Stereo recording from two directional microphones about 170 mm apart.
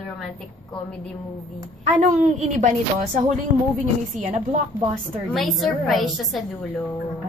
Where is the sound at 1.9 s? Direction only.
45° right (ahead or behind).